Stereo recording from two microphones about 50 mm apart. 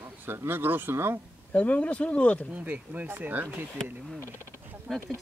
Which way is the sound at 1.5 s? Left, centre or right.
Left.